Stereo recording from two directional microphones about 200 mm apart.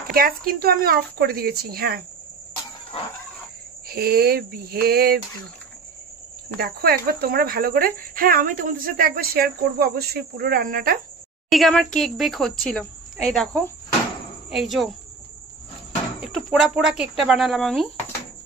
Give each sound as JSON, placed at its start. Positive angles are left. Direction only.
{"t": 0.1, "sound": "speech", "side_deg": -50}
{"t": 3.9, "sound": "speech", "side_deg": -50}
{"t": 6.6, "sound": "speech", "side_deg": -50}
{"t": 11.4, "sound": "a woman's voice", "side_deg": 0}
{"t": 16.2, "sound": "cricket", "side_deg": 0}
{"t": 17.3, "sound": "speech", "side_deg": 0}